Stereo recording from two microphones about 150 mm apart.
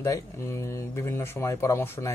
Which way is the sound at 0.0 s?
20° left (ahead or behind).